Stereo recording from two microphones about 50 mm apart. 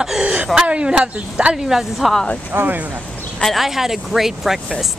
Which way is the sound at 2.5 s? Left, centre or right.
Right.